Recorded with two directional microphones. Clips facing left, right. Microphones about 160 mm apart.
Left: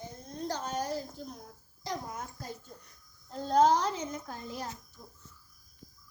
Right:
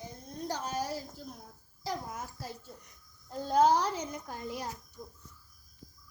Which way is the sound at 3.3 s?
5° right (ahead or behind).